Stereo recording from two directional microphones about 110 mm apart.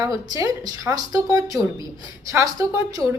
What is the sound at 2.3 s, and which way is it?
Speech, 20° right (ahead or behind).